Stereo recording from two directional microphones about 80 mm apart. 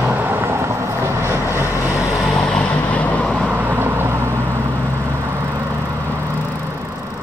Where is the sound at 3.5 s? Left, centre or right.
Right.